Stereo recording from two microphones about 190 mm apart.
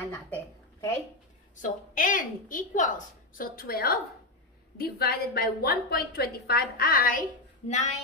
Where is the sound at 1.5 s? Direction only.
45° left (ahead or behind).